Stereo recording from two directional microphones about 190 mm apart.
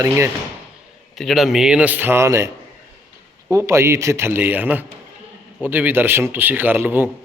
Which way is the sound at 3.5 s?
15° right (ahead or behind).